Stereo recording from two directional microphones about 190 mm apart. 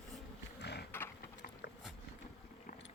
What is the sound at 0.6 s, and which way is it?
Wild animals, 60° left (ahead or behind).